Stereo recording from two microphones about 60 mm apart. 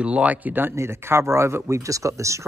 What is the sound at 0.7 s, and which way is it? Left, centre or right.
Speech, right.